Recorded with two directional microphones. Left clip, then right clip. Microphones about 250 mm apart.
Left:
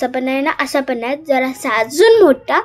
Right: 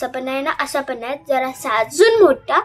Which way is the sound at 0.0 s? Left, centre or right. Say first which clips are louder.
Left 4 dB; centre.